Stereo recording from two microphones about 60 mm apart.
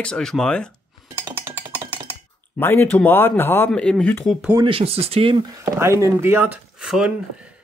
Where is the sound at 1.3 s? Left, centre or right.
Right.